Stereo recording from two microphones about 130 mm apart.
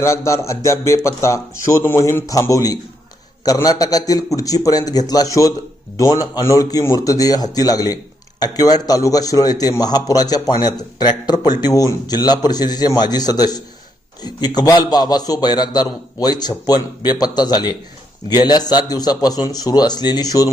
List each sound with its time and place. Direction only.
0.3 s a man's voice: 25° left (ahead or behind)